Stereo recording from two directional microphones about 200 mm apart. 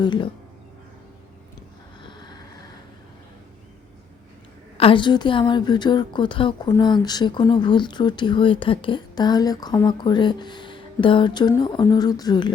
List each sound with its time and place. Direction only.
0.0 s a woman's voice: 25° left (ahead or behind)
2.0 s vehicle: 20° left (ahead or behind)
4.8 s a woman's voice: 25° left (ahead or behind)